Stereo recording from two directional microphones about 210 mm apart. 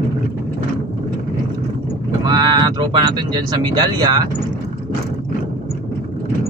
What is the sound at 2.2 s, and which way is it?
Speech, 20° right (ahead or behind).